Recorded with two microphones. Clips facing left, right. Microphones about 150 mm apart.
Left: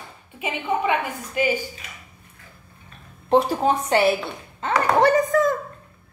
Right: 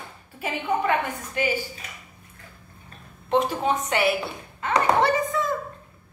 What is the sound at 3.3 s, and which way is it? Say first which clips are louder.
Speech: left 4 dB; 35° left (ahead or behind).